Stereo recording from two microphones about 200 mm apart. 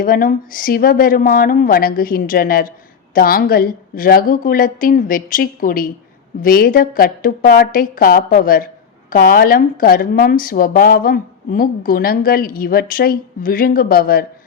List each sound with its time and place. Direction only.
0.0 s a woman's voice: 45° left (ahead or behind)